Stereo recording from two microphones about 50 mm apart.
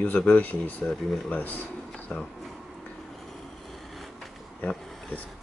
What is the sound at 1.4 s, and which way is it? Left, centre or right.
Speech, left.